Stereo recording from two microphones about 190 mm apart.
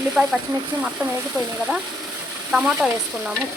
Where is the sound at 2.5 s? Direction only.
Centre (ahead or behind).